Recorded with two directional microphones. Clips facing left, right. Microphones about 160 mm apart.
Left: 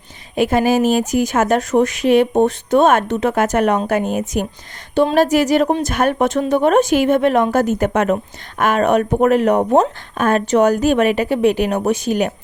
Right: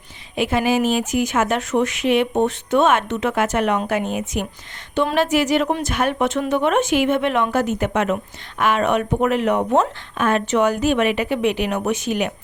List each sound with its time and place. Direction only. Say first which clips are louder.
0.3 s speech: left 4 dB; 40° left (ahead or behind)